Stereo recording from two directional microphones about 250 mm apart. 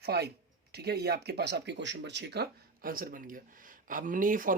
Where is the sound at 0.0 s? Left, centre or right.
Right.